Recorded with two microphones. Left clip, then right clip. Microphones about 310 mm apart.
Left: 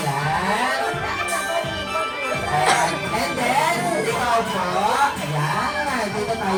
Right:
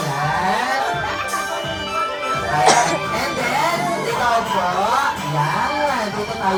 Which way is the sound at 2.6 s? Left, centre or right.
Centre.